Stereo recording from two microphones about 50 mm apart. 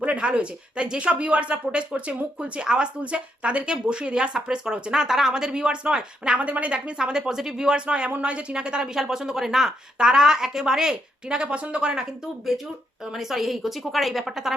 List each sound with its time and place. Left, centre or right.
0.0 s a woman's voice: right
6.4 s speech: right
12.5 s a woman's voice: centre